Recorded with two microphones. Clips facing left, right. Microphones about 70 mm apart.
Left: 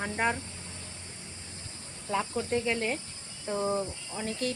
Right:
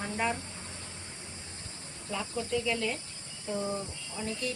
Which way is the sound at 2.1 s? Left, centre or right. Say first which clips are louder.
Left 4 dB; left.